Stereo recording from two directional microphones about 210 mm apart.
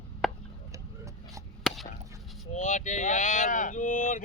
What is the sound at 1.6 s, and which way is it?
Chop, centre (ahead or behind).